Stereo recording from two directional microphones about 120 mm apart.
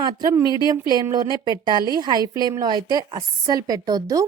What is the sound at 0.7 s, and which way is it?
A woman's voice, 35° right (ahead or behind).